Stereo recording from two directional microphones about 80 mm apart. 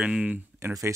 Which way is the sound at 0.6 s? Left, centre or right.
Right.